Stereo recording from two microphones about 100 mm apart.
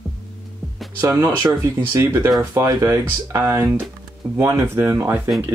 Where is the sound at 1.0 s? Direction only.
25° right (ahead or behind).